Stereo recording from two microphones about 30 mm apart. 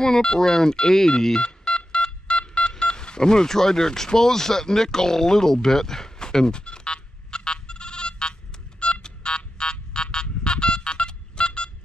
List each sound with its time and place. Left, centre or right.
0.0 s speech: left
1.4 s telephone dialing: left
2.7 s a sound: left